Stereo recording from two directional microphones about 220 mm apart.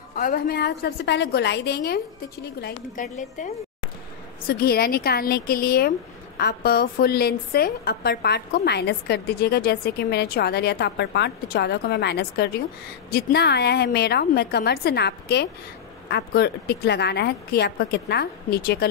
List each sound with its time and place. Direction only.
0.1 s speech: 40° left (ahead or behind)
2.6 s a woman's voice: 35° left (ahead or behind)
4.5 s speech: 45° left (ahead or behind)